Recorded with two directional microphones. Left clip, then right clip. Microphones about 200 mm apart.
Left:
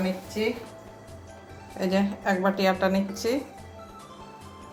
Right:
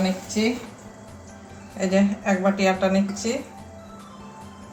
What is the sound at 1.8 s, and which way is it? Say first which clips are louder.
A woman's voice: right 4 dB; 45° left (ahead or behind).